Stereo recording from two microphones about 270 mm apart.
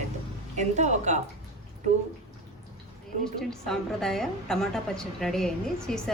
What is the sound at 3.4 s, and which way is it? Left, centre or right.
A woman's voice, centre.